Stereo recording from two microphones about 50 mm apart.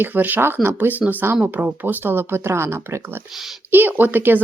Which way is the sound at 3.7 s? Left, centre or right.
Right.